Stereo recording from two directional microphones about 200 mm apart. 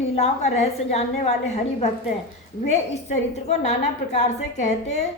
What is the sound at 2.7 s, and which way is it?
A woman's voice, 35° left (ahead or behind).